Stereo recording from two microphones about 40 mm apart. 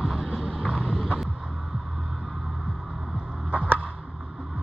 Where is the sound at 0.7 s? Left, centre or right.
Left.